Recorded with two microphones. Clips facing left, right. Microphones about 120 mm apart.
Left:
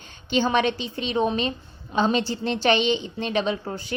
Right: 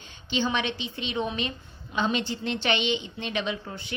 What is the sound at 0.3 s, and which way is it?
A woman's voice, 50° left (ahead or behind).